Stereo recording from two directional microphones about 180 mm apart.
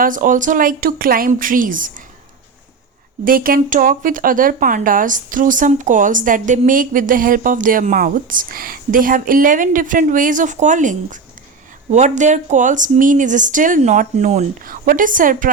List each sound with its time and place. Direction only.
0.0 s speech: 45° right (ahead or behind)
3.2 s speech: 50° right (ahead or behind)